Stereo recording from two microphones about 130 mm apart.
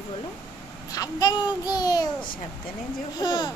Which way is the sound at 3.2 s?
35° left (ahead or behind).